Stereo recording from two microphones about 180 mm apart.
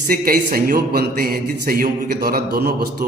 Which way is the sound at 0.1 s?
55° right (ahead or behind).